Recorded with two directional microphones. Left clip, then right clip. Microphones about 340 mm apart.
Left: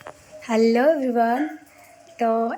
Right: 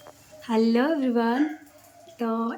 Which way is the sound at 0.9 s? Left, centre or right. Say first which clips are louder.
Left 7 dB; right.